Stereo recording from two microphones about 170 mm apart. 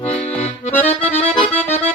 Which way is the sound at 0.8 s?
40° left (ahead or behind).